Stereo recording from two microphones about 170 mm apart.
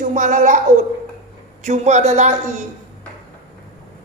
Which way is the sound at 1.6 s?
45° right (ahead or behind).